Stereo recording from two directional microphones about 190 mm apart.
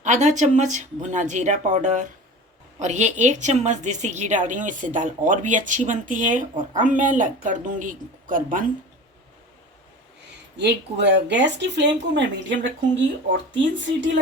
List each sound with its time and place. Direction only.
0.0 s a woman's voice: 40° right (ahead or behind)
10.6 s speech: 65° right (ahead or behind)